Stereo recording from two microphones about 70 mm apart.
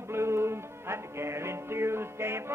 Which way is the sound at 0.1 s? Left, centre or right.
Right.